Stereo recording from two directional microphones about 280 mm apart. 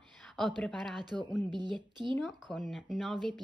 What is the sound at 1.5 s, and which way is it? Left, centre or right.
Speech, centre.